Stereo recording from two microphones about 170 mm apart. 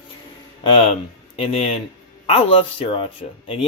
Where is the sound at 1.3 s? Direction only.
35° left (ahead or behind).